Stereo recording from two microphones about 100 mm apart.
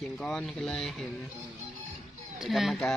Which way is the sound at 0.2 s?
5° left (ahead or behind).